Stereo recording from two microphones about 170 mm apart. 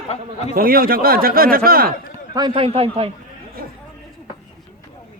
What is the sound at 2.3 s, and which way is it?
Speech, 30° right (ahead or behind).